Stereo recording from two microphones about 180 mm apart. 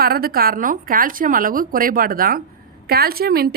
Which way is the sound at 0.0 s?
55° right (ahead or behind).